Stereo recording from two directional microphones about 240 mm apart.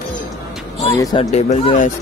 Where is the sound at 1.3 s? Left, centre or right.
Left.